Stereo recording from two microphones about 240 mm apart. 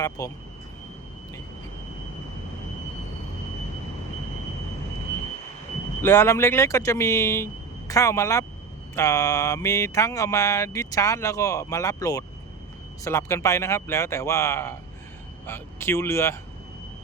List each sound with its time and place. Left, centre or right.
0.2 s mantra: centre
6.0 s mantra: centre